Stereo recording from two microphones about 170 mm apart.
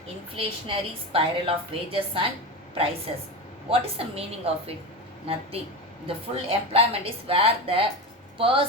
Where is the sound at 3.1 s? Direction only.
35° right (ahead or behind).